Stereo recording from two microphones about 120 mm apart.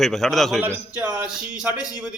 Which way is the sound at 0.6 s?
15° right (ahead or behind).